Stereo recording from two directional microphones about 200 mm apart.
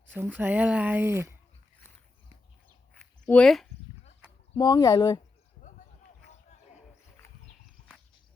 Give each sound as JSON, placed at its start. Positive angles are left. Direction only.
{"t": 0.1, "sound": "speech", "side_deg": -10}
{"t": 3.2, "sound": "speech", "side_deg": 5}
{"t": 4.5, "sound": "speech", "side_deg": 20}